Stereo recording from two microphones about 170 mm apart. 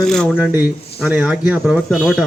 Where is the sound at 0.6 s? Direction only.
10° right (ahead or behind).